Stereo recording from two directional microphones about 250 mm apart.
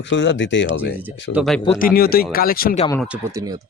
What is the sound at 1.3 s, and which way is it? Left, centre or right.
Speech, centre.